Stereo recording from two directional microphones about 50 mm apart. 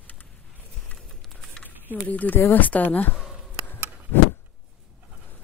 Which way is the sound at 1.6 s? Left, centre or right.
Left.